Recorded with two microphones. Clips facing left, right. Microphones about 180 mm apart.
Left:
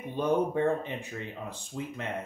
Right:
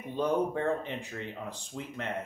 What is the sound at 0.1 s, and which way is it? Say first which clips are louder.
Speech: left 2 dB; 10° left (ahead or behind).